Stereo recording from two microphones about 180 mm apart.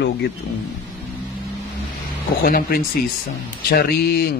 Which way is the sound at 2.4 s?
55° left (ahead or behind).